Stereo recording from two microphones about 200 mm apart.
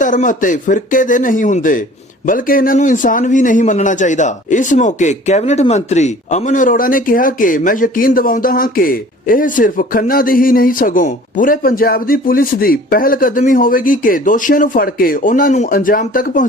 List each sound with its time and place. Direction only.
0.0 s a man's voice: 40° left (ahead or behind)